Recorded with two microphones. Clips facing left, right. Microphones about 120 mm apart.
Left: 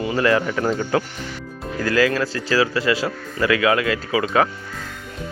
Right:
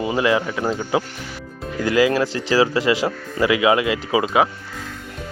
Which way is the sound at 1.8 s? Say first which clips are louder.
Right 2 dB; 20° right (ahead or behind).